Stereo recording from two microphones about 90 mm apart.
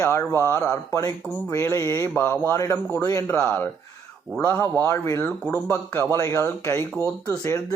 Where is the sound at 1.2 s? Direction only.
20° left (ahead or behind).